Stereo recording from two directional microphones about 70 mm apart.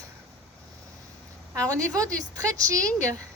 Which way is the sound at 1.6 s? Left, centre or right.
Right.